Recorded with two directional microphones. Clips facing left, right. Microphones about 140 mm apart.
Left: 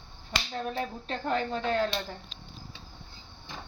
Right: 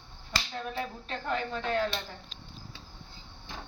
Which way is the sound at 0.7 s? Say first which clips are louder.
Left 3 dB; 30° left (ahead or behind).